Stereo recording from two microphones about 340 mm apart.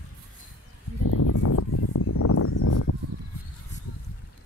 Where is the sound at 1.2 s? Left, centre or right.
Left.